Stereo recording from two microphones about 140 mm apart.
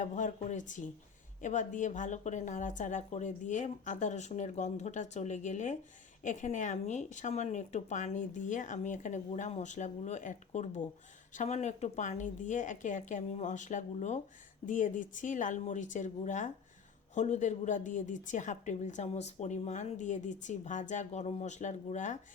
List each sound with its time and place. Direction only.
0.0 s a woman's voice: 60° left (ahead or behind)